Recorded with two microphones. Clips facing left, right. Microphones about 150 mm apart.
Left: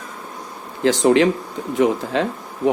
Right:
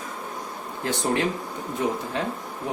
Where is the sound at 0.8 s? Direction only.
90° left.